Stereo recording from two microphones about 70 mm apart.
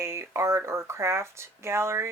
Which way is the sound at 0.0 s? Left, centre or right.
Right.